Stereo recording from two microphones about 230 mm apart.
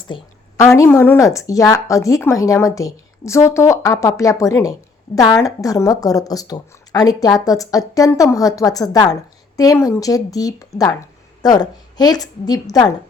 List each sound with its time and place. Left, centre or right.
0.1 s speech: centre